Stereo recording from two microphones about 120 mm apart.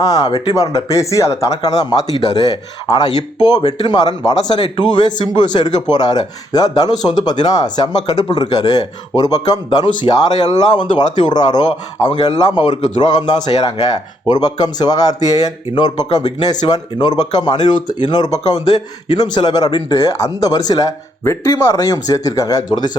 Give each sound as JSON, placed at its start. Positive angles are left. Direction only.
{"t": 0.0, "sound": "speech", "side_deg": 30}